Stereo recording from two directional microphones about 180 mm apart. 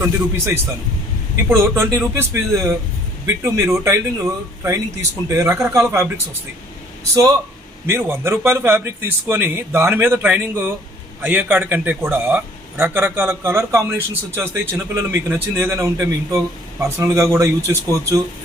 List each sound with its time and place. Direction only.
0.0 s a man's voice: 15° right (ahead or behind)
7.9 s a man's voice: 15° right (ahead or behind)